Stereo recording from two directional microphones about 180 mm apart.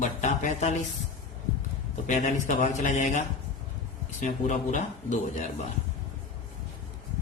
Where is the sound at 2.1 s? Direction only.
40° left (ahead or behind).